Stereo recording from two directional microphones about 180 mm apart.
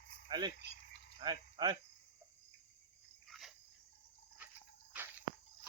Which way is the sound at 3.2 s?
Centre (ahead or behind).